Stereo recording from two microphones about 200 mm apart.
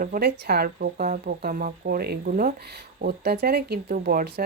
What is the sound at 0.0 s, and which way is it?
Speech, 50° right (ahead or behind).